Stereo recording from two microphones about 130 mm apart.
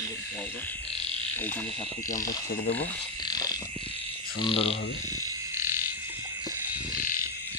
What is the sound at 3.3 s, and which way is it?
Frog, 30° left (ahead or behind).